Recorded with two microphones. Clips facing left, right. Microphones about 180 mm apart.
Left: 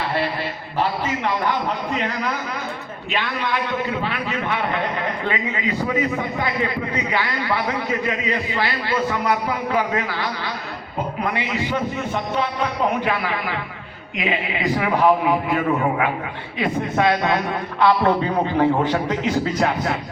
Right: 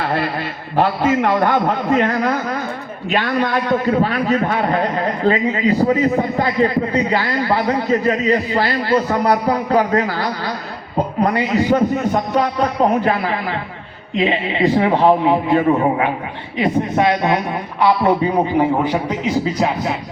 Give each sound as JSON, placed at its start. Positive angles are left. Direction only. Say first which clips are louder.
{"t": 0.0, "sound": "a man's voice", "louder": "right 3 dB", "side_deg": -50}